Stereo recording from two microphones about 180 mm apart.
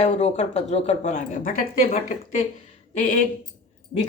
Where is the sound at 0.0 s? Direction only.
40° left (ahead or behind).